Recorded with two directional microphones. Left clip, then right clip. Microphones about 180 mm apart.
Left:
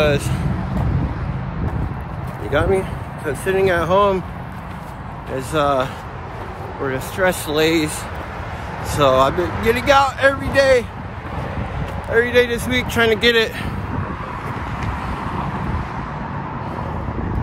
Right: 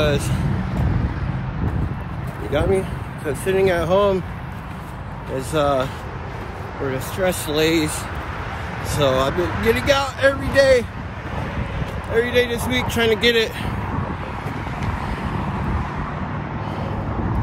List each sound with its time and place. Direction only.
2.5 s speech: 15° left (ahead or behind)
5.3 s speech: 15° left (ahead or behind)
6.9 s speech: 15° left (ahead or behind)
9.0 s speech: 20° left (ahead or behind)
12.2 s speech: 25° left (ahead or behind)